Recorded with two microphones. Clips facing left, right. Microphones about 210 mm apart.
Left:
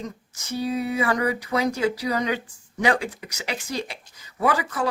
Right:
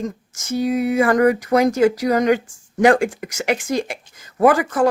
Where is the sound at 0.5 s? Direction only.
45° right (ahead or behind).